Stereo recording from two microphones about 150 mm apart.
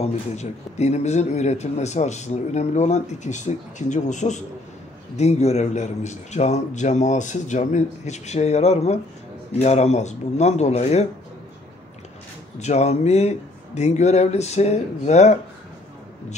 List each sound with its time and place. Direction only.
0.0 s a man's voice: 50° left (ahead or behind)
12.5 s a man's voice: 50° left (ahead or behind)